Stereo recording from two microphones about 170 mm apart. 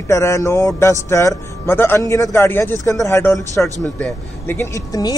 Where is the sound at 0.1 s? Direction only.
15° left (ahead or behind).